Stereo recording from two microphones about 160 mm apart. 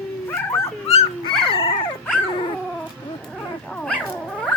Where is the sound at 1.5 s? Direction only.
35° left (ahead or behind).